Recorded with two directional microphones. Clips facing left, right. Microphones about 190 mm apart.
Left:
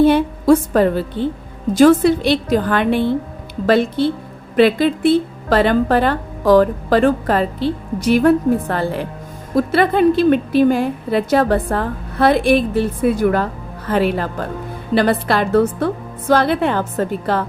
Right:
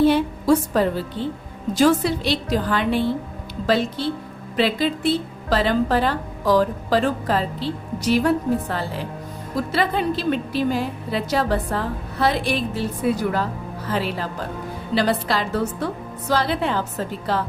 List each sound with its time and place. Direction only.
0.0 s a woman's voice: 55° left (ahead or behind)